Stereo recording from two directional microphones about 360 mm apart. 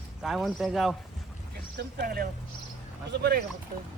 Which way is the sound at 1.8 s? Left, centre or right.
Right.